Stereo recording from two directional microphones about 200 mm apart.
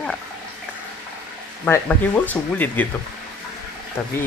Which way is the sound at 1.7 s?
10° left (ahead or behind).